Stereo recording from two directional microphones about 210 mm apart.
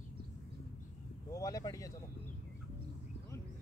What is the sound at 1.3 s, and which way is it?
Speech, 15° left (ahead or behind).